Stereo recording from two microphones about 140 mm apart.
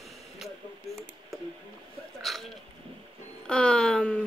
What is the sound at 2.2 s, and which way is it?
Hiccup, centre (ahead or behind).